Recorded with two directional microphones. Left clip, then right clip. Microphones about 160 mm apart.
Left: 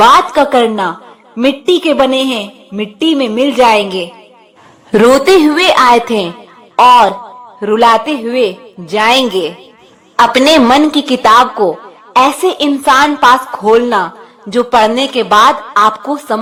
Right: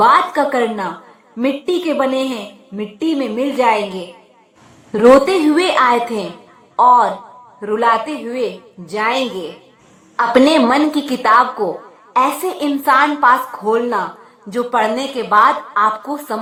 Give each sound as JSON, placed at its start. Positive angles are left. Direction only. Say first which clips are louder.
{"t": 0.0, "sound": "a woman's voice", "louder": "left 5 dB", "side_deg": 30}
{"t": 7.6, "sound": "a woman's voice", "louder": "left 7 dB", "side_deg": 45}
{"t": 10.7, "sound": "a woman's voice", "louder": "left 6 dB", "side_deg": 30}